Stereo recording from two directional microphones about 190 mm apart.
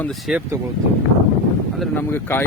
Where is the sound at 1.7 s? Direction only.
5° left (ahead or behind).